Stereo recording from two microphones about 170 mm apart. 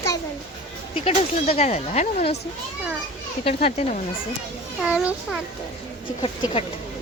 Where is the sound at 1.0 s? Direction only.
35° left (ahead or behind).